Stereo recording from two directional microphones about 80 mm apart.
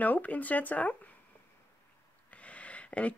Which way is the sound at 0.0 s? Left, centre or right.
Left.